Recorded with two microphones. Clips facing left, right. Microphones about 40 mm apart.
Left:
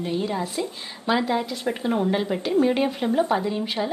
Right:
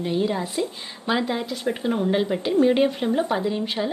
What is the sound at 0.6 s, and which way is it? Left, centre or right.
Speech, centre.